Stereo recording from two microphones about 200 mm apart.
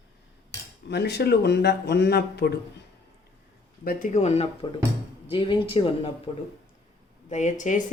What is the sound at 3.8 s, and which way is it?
Speech, 45° left (ahead or behind).